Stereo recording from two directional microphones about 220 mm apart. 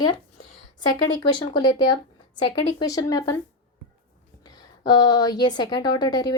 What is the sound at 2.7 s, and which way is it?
Speech, 15° left (ahead or behind).